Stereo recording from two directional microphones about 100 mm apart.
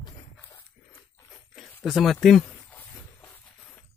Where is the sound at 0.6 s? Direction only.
25° left (ahead or behind).